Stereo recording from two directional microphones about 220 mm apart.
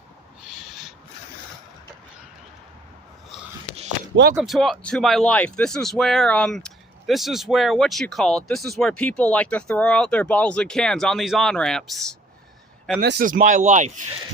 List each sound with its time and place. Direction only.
0.5 s owl: centre (ahead or behind)
4.4 s speech: centre (ahead or behind)
13.0 s speech: 45° right (ahead or behind)